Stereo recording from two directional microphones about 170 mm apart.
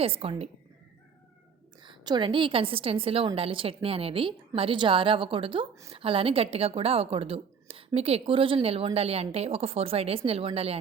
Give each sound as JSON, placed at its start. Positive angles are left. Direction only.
{"t": 0.0, "sound": "a woman's voice", "side_deg": -35}
{"t": 1.8, "sound": "a woman's voice", "side_deg": -25}